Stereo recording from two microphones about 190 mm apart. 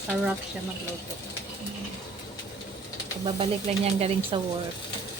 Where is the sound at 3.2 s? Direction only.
30° right (ahead or behind).